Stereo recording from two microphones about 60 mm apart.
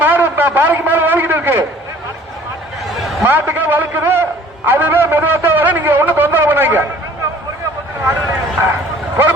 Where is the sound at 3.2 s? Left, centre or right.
Right.